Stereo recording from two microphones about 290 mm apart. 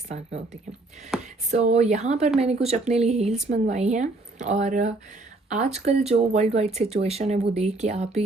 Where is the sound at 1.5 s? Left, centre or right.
Right.